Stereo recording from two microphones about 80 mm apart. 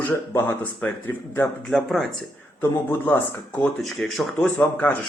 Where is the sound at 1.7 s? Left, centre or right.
Centre.